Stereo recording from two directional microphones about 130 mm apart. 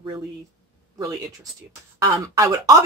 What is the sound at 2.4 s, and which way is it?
Speech, 25° right (ahead or behind).